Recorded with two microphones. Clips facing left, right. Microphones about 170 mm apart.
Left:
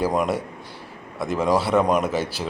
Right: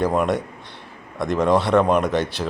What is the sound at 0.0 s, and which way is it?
Speech, 10° left (ahead or behind).